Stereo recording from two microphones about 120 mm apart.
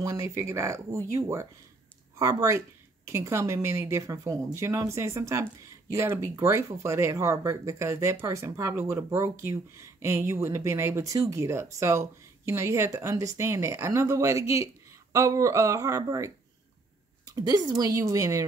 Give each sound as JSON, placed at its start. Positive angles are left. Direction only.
{"t": 0.0, "sound": "speech", "side_deg": -25}
{"t": 17.3, "sound": "a woman's voice", "side_deg": -30}